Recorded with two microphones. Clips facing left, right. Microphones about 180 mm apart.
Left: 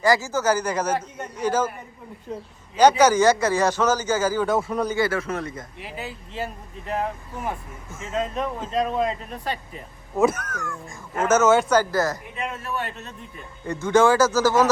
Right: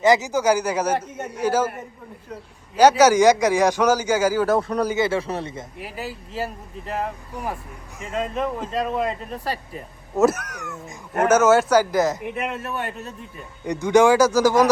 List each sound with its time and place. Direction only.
0.0 s a man's voice: 20° right (ahead or behind)
2.7 s a man's voice: 10° right (ahead or behind)
4.9 s speech: 25° right (ahead or behind)
6.8 s a man's voice: centre (ahead or behind); by 10.9 s 20° right (ahead or behind)
11.3 s a man's voice: 10° right (ahead or behind)
12.2 s a man's voice: 65° right (ahead or behind)
13.7 s a man's voice: 15° right (ahead or behind)